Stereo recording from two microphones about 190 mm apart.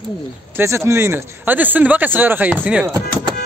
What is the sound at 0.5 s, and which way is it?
Speech, 15° right (ahead or behind).